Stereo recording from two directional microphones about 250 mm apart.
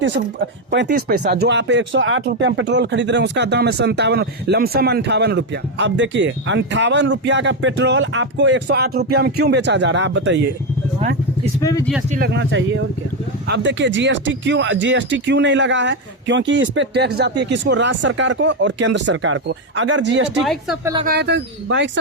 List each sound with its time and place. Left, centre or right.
0.7 s speech: right
12.1 s speech: right
20.4 s a woman's voice: centre
21.0 s speech: right